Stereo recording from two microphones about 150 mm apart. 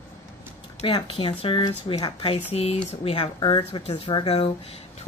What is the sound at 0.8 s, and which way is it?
Speech, 40° left (ahead or behind).